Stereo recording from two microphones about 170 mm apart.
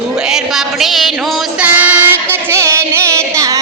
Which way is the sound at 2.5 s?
15° right (ahead or behind).